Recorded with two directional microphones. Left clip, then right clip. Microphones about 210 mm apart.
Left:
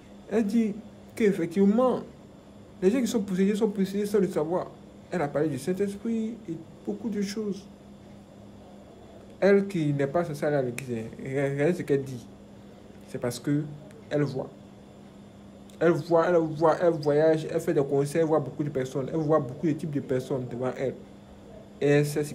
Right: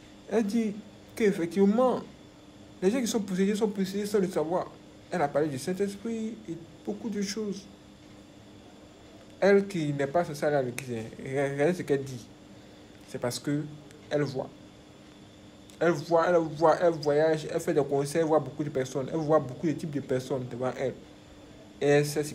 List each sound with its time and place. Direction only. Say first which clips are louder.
0.3 s a man's voice: left 1 dB; 15° left (ahead or behind)
9.4 s a man's voice: left 1 dB; 15° left (ahead or behind)
15.8 s a man's voice: left 2 dB; 20° left (ahead or behind)